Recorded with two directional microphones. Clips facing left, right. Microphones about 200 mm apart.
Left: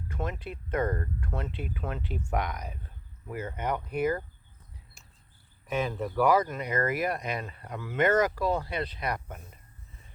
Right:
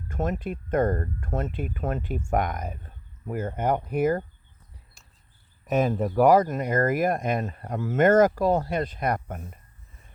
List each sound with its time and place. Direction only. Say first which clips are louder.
0.1 s speech: right 7 dB; 45° right (ahead or behind)
5.6 s speech: right 7 dB; 45° right (ahead or behind)